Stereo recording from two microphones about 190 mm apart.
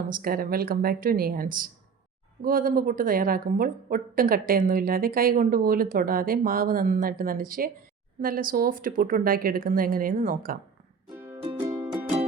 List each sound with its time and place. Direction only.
0.2 s a woman's voice: 50° right (ahead or behind)
11.5 s music: 15° right (ahead or behind)